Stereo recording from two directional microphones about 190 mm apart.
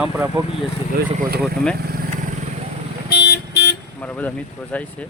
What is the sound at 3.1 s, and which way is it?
Vehicle, 60° left (ahead or behind).